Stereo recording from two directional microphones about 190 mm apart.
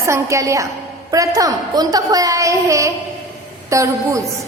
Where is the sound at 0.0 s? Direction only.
15° right (ahead or behind).